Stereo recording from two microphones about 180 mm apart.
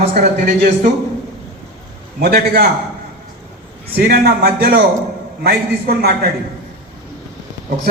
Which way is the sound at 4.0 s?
55° right (ahead or behind).